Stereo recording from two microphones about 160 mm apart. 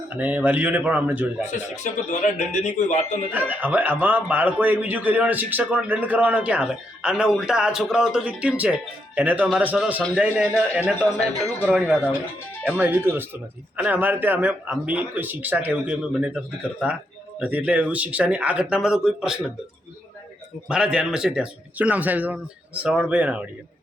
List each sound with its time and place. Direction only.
0.1 s a man's voice: 10° right (ahead or behind)
1.7 s speech: 50° left (ahead or behind)
3.3 s a man's voice: 10° right (ahead or behind)
11.6 s a man's voice: 5° right (ahead or behind)
20.7 s a man's voice: 5° right (ahead or behind)